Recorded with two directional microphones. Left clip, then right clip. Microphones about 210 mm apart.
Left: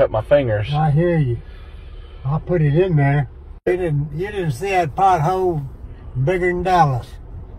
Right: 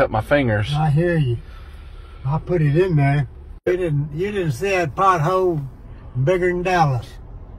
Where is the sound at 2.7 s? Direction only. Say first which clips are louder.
Left 1 dB; 25° right (ahead or behind).